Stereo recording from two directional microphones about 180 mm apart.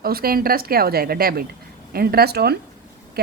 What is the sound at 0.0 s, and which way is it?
A woman's voice, 55° right (ahead or behind).